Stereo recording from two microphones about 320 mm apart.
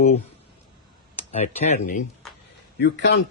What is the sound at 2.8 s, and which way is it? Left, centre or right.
Speech, left.